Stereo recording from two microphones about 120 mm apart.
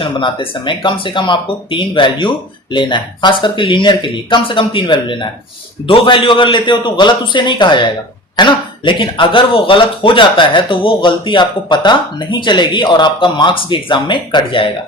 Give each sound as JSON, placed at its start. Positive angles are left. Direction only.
{"t": 0.0, "sound": "speech", "side_deg": 45}